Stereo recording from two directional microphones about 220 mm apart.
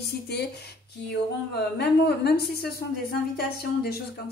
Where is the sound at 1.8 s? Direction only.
50° left (ahead or behind).